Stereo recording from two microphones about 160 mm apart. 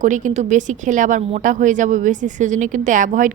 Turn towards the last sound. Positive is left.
turn(degrees=-55)  # may be behind; listen again after turning